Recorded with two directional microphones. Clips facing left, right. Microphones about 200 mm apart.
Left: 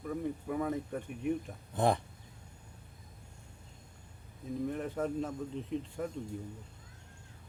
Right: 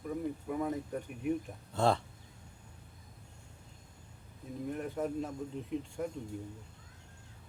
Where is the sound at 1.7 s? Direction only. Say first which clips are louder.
Even; 15° left (ahead or behind).